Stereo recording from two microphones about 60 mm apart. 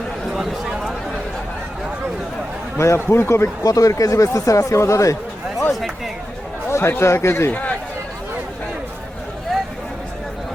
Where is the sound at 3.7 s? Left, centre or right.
Left.